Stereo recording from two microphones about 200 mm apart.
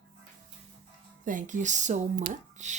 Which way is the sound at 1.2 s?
40° right (ahead or behind).